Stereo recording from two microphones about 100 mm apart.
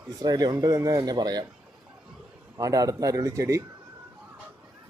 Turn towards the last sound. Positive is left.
turn(degrees=-30)  # may be behind; listen again after turning